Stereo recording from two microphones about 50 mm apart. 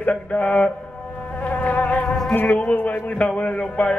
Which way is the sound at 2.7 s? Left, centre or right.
Left.